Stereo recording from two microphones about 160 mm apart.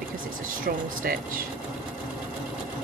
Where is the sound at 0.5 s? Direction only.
60° right (ahead or behind).